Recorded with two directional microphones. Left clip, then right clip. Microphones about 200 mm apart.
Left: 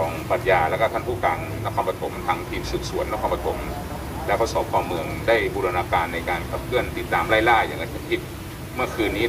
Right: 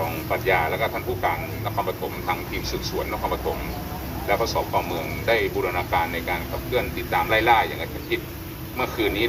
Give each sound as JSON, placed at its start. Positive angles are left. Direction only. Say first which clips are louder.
{"t": 0.3, "sound": "speech", "louder": "left 2 dB", "side_deg": 15}
{"t": 4.3, "sound": "speech", "louder": "left 1 dB", "side_deg": 20}
{"t": 8.8, "sound": "speech", "louder": "even", "side_deg": 5}